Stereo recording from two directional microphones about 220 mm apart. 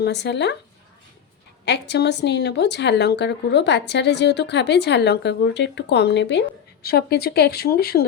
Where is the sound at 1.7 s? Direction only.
50° left (ahead or behind).